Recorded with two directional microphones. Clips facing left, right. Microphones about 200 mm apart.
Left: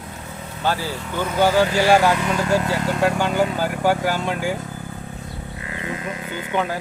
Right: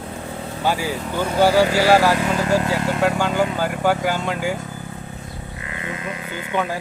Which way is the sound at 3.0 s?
10° left (ahead or behind).